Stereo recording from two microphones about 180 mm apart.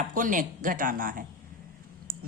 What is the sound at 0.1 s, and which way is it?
A woman's voice, 45° right (ahead or behind).